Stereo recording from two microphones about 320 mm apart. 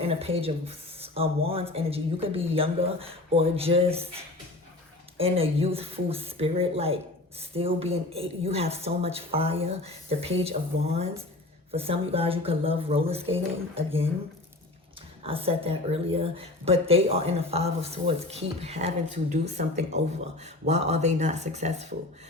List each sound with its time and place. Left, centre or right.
0.0 s a woman's voice: centre
15.2 s a woman's voice: centre